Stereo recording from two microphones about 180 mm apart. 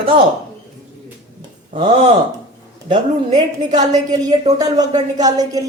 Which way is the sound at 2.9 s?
25° right (ahead or behind).